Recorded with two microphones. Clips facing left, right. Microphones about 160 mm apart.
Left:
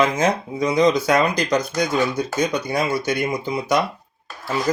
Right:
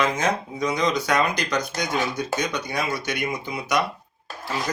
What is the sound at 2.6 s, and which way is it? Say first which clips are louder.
Speech: left 6 dB; 30° left (ahead or behind).